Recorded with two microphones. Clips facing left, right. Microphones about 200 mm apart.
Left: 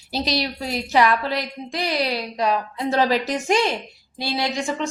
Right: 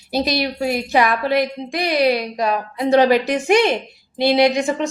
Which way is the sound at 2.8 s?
20° right (ahead or behind).